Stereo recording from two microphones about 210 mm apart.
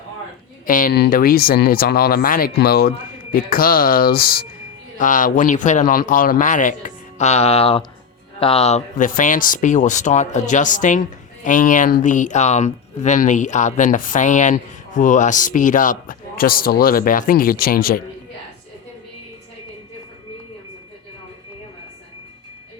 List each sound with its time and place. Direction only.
0.7 s speech: 40° left (ahead or behind)